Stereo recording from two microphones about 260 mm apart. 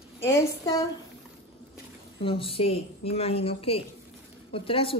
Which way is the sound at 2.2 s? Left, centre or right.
Left.